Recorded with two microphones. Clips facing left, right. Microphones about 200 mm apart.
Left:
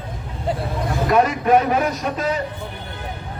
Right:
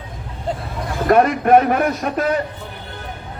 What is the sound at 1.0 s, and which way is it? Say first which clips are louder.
A man's voice: right 4 dB; 55° right (ahead or behind).